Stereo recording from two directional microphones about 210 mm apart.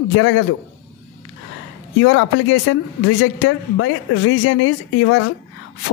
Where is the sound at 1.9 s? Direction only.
70° left (ahead or behind).